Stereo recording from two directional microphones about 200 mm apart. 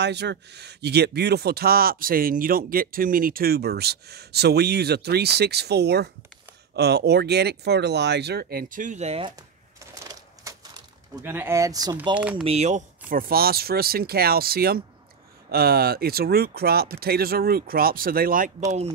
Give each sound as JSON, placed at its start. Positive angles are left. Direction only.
{"t": 0.0, "sound": "speech", "side_deg": -55}
{"t": 10.4, "sound": "typewriter", "side_deg": -20}
{"t": 11.2, "sound": "speech", "side_deg": -10}
{"t": 12.1, "sound": "speech", "side_deg": -5}
{"t": 12.4, "sound": "speech", "side_deg": -35}